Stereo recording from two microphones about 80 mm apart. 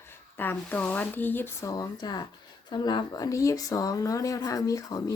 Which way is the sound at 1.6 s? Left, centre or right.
Left.